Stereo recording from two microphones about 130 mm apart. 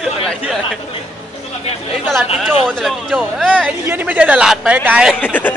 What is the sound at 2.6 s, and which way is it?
Speech, centre (ahead or behind).